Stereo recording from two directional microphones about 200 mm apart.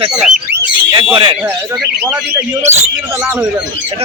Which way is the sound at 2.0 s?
10° right (ahead or behind).